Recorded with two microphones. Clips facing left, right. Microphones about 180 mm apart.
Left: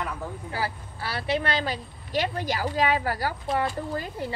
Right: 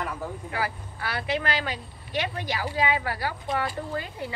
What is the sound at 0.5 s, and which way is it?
A woman's voice, 30° left (ahead or behind).